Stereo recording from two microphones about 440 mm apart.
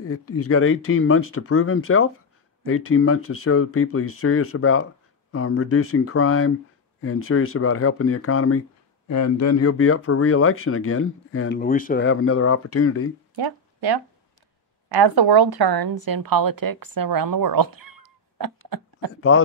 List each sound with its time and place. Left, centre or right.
0.0 s speech: left
13.4 s a woman's voice: right
18.7 s a sound: right